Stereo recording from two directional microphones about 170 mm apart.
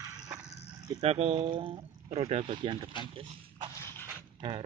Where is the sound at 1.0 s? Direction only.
35° right (ahead or behind).